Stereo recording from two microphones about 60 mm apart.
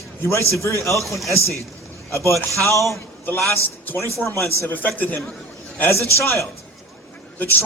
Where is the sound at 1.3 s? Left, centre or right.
Right.